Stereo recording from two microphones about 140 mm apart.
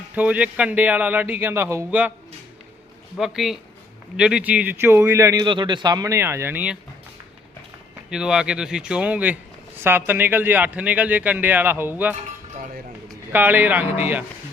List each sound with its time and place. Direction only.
0.1 s speech: 10° right (ahead or behind)
3.2 s speech: centre (ahead or behind)
8.1 s speech: 5° right (ahead or behind)
13.3 s speech: 15° right (ahead or behind)